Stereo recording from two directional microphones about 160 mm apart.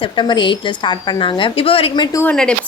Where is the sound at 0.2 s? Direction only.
30° left (ahead or behind).